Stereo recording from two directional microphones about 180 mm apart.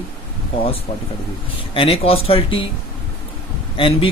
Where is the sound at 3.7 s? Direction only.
30° left (ahead or behind).